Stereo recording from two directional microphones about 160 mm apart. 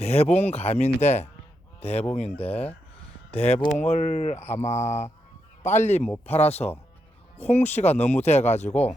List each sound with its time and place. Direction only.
0.0 s speech: 40° left (ahead or behind)
2.5 s speech: 10° left (ahead or behind)
3.3 s speech: 40° left (ahead or behind)